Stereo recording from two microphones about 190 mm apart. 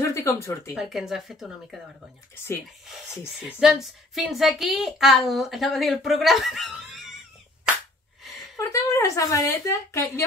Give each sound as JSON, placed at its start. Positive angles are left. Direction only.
{"t": 0.0, "sound": "speech", "side_deg": 15}
{"t": 0.7, "sound": "a woman's voice", "side_deg": 0}
{"t": 3.4, "sound": "a woman's voice", "side_deg": -5}
{"t": 8.5, "sound": "a woman's voice", "side_deg": 15}